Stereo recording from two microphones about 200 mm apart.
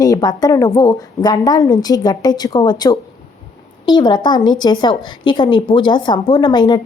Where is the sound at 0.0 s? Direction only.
20° left (ahead or behind).